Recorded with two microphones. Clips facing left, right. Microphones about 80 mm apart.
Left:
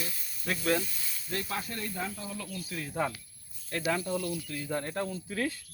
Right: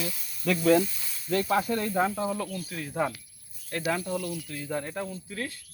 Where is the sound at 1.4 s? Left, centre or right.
Right.